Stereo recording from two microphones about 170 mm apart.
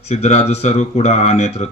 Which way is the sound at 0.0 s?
40° left (ahead or behind).